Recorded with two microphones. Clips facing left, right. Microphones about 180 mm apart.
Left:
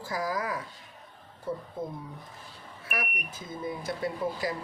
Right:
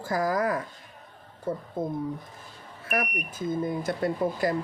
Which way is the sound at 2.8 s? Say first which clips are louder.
Right 7 dB; 50° right (ahead or behind).